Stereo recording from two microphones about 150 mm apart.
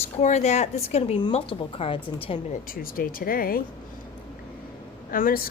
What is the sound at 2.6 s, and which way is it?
Speech, 75° left (ahead or behind).